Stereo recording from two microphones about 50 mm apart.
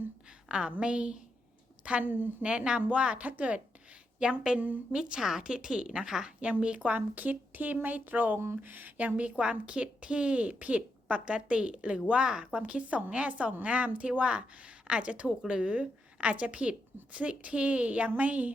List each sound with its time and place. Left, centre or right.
0.4 s a woman's voice: centre
2.0 s a woman's voice: right
2.4 s a woman's voice: centre
4.2 s a woman's voice: centre